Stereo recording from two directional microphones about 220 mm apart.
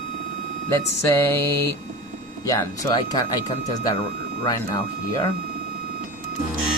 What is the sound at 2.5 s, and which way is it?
Speech, 15° left (ahead or behind).